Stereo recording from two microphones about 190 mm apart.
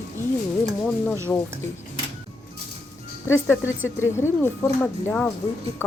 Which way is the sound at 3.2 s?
10° left (ahead or behind).